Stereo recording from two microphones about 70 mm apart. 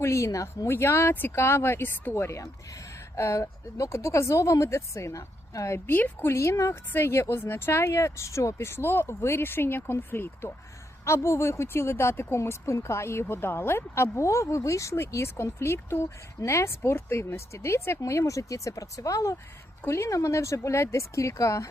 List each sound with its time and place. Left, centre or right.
0.0 s speech: left
0.7 s speech: left
5.9 s speech: left
6.3 s speech: left
11.0 s speech: left
19.8 s speech: left